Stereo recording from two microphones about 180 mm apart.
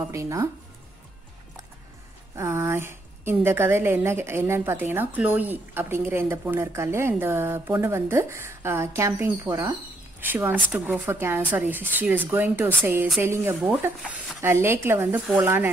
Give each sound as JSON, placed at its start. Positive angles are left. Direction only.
{"t": 0.0, "sound": "a woman's voice", "side_deg": -15}
{"t": 2.3, "sound": "a woman's voice", "side_deg": -15}